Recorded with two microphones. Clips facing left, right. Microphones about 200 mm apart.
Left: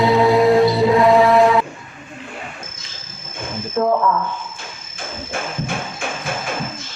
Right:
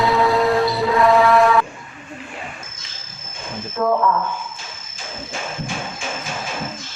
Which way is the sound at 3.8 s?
25° left (ahead or behind).